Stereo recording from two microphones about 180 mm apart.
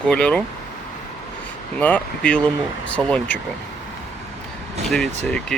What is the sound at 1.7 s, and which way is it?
Speech, 10° left (ahead or behind).